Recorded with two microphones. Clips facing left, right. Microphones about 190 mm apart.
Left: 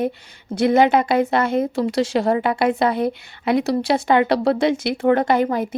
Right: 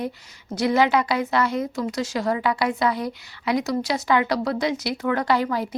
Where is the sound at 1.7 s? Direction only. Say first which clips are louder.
Left 6 dB; 30° left (ahead or behind).